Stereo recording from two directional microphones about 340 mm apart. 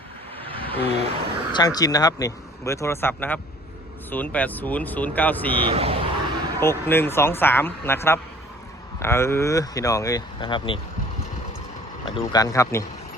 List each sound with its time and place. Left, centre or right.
0.4 s vehicle: centre
1.5 s speech: centre
5.6 s speech: centre
6.6 s speech: centre
12.0 s speech: centre